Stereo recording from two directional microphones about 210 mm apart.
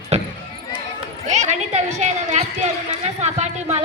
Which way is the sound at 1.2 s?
35° right (ahead or behind).